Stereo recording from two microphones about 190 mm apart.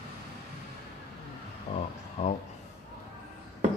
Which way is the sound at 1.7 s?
35° left (ahead or behind).